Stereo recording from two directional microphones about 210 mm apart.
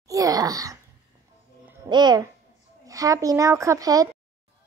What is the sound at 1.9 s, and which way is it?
A child's voice, 20° right (ahead or behind).